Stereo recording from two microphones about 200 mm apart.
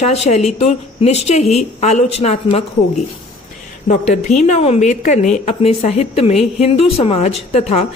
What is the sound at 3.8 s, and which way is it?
A woman's voice, 35° left (ahead or behind).